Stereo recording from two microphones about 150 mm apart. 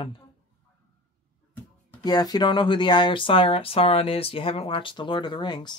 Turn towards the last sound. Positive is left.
turn(degrees=30)  # may be behind; listen again after turning